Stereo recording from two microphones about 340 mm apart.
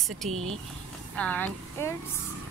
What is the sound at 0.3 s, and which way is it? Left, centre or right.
Speech, right.